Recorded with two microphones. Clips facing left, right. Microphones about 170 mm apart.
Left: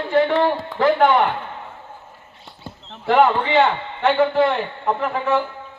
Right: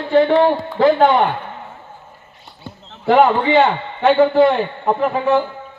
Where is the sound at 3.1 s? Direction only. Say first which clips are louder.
Right 3 dB; 20° right (ahead or behind).